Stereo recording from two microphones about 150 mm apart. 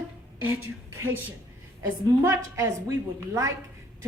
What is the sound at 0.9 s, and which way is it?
A woman's voice, 15° right (ahead or behind).